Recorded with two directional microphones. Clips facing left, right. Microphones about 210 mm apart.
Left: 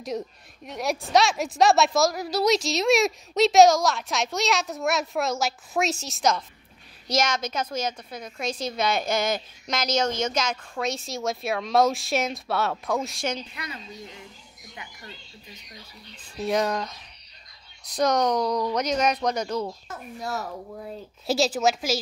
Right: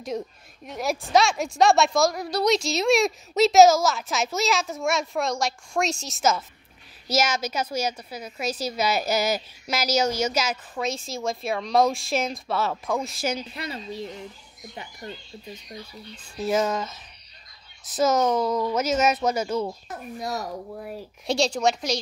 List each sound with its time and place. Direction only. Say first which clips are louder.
0.0 s a woman's voice: even; centre (ahead or behind)
13.6 s a woman's voice: right 6 dB; 30° right (ahead or behind)
16.3 s a woman's voice: right 1 dB; centre (ahead or behind)
21.3 s a woman's voice: even; 5° left (ahead or behind)